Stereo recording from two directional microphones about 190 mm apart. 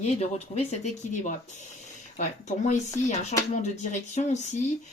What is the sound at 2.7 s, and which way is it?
Speech, 35° left (ahead or behind).